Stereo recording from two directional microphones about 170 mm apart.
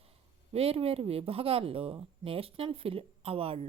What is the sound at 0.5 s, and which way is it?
Speech, 35° right (ahead or behind).